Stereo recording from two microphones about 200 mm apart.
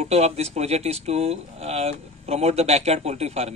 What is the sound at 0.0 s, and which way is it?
A man's voice, 30° right (ahead or behind).